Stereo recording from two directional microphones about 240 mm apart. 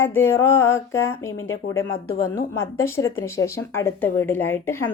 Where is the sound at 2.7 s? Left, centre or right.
Centre.